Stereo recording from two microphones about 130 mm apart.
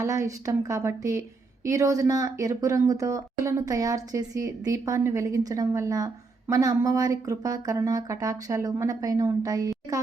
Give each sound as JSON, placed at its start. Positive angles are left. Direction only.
{"t": 0.0, "sound": "speech", "side_deg": -25}